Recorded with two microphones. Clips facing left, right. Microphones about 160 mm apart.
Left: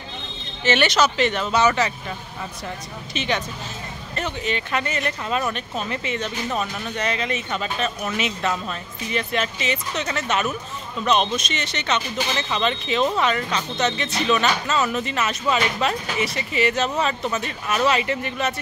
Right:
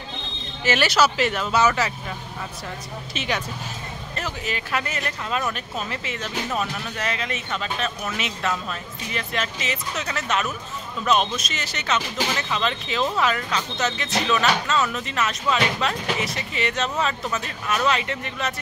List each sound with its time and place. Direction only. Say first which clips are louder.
0.7 s speech: left 1 dB; 5° right (ahead or behind)
3.2 s speech: left 3 dB; 5° right (ahead or behind)